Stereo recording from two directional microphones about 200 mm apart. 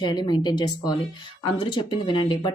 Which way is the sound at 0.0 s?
20° left (ahead or behind).